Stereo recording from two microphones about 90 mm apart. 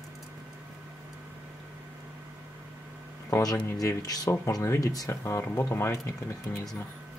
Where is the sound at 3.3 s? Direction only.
35° left (ahead or behind).